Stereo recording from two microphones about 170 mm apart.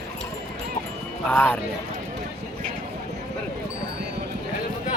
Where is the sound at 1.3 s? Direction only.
10° left (ahead or behind).